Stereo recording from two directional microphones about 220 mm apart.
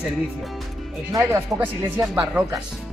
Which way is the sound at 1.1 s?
15° right (ahead or behind).